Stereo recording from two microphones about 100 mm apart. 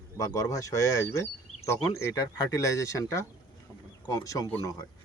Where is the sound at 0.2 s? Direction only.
35° left (ahead or behind).